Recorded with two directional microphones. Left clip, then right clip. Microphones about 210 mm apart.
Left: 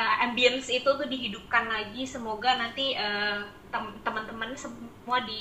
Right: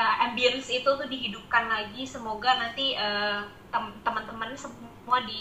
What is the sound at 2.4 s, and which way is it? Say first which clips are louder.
Speech: right 1 dB; 15° left (ahead or behind).